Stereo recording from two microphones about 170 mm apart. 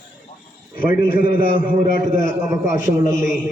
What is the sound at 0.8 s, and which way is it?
A man's voice, 60° left (ahead or behind).